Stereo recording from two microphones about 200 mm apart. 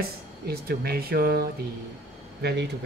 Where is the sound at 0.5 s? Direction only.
50° right (ahead or behind).